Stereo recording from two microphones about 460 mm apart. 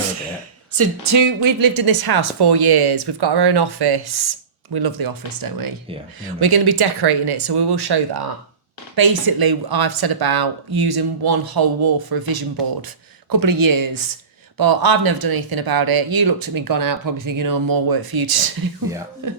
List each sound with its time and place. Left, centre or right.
0.7 s speech: right